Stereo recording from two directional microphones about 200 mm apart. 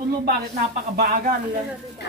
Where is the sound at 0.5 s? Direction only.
45° right (ahead or behind).